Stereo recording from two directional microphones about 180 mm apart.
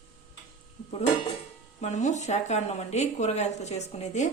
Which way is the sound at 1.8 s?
40° left (ahead or behind).